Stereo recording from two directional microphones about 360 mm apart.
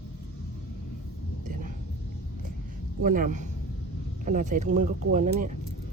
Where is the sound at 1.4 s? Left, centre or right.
Right.